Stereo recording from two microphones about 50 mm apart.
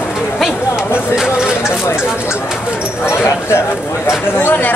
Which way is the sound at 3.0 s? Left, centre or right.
Left.